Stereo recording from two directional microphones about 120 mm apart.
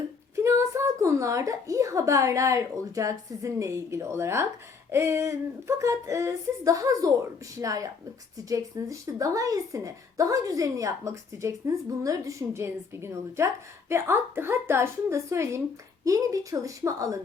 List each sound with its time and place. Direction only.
0.3 s speech: 25° right (ahead or behind)